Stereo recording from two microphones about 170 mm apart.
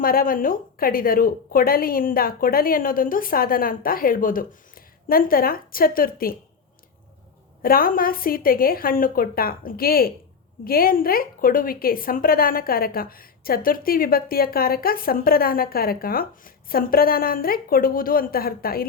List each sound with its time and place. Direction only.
0.0 s a woman's voice: 60° left (ahead or behind)
7.6 s a woman's voice: 55° left (ahead or behind)